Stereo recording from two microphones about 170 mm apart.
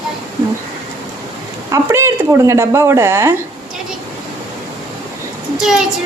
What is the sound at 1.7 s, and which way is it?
Speech, 15° right (ahead or behind).